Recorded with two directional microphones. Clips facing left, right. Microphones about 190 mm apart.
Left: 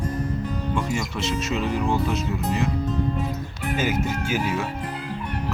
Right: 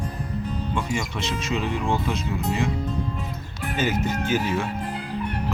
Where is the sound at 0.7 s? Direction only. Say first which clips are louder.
Left 1 dB; 5° left (ahead or behind).